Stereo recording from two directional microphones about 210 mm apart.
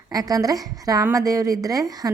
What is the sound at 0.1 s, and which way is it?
A woman's voice, 15° right (ahead or behind).